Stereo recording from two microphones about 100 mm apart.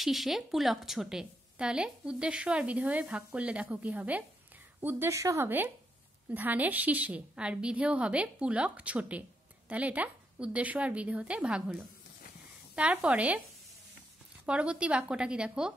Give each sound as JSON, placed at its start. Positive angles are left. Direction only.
{"t": 0.0, "sound": "a woman's voice", "side_deg": 0}
{"t": 6.3, "sound": "a woman's voice", "side_deg": -15}
{"t": 14.4, "sound": "a woman's voice", "side_deg": -10}